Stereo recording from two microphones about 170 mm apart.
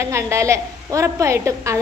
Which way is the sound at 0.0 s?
15° right (ahead or behind).